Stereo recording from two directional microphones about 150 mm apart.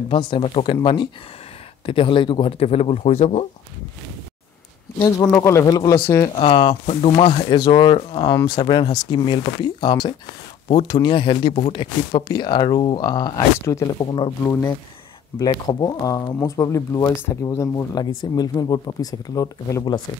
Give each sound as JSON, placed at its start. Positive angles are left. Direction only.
{"t": 0.1, "sound": "speech", "side_deg": 35}
{"t": 1.9, "sound": "speech", "side_deg": 35}
{"t": 5.2, "sound": "speech", "side_deg": 15}
{"t": 6.2, "sound": "speech", "side_deg": 35}
{"t": 14.4, "sound": "speech", "side_deg": 20}